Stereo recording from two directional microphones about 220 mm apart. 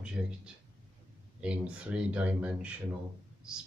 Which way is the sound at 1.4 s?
5° right (ahead or behind).